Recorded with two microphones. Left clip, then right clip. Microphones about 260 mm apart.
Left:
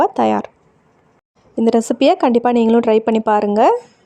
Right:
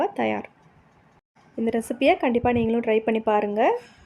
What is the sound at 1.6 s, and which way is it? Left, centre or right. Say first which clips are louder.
Speech: left 10 dB; left.